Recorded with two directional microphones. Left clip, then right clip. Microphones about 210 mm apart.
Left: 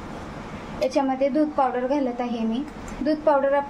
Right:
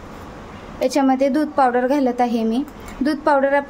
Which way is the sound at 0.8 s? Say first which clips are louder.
Right 5 dB; 45° right (ahead or behind).